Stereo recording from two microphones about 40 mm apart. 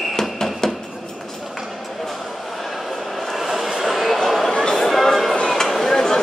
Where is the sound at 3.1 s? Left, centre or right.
Centre.